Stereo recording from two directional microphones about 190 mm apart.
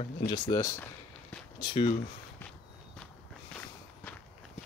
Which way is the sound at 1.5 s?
25° left (ahead or behind).